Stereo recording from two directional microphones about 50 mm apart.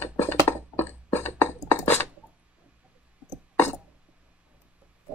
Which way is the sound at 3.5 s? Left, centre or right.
Left.